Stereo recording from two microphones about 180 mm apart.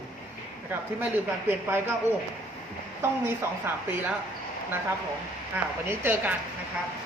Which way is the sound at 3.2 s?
10° right (ahead or behind).